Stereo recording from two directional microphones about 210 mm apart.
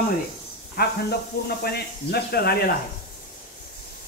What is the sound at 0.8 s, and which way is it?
Speech, 50° left (ahead or behind).